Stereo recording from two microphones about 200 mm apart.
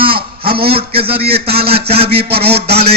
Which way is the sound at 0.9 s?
30° right (ahead or behind).